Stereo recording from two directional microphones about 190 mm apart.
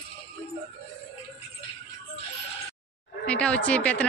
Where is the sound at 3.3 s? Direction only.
5° left (ahead or behind).